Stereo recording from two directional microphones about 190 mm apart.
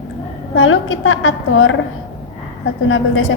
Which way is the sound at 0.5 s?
90° left.